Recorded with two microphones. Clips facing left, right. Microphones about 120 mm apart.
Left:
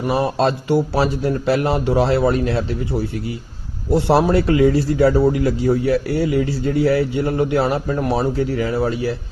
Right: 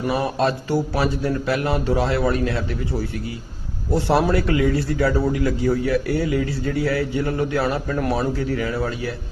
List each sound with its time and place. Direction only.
0.1 s a man's voice: 25° left (ahead or behind)